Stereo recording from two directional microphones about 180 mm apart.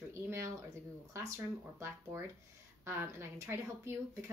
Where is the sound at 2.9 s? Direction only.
15° right (ahead or behind).